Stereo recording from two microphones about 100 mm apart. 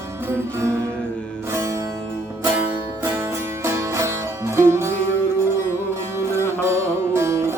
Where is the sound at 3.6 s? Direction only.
30° right (ahead or behind).